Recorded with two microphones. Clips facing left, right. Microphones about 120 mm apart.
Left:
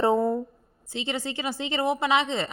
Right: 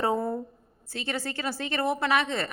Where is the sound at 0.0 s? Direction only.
25° left (ahead or behind).